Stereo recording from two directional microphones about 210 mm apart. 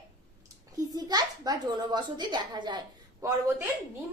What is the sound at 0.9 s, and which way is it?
A child's voice, 20° right (ahead or behind).